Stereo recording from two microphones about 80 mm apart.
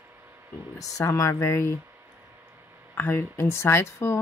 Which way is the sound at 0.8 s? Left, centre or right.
Left.